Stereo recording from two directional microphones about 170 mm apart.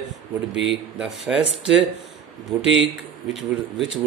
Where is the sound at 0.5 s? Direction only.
90° right.